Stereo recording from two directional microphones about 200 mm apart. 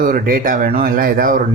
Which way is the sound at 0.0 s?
45° right (ahead or behind).